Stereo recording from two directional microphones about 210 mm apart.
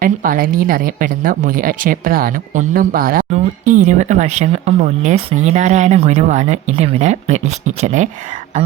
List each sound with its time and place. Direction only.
0.0 s speech: 40° right (ahead or behind)